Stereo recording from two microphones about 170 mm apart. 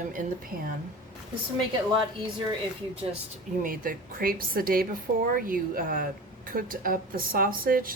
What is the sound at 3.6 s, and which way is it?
Speech, 55° right (ahead or behind).